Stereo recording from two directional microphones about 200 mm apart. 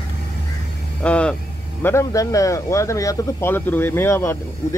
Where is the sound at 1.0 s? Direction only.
5° left (ahead or behind).